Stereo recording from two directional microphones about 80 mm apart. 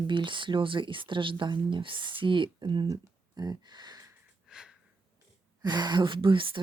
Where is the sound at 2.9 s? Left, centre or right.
Right.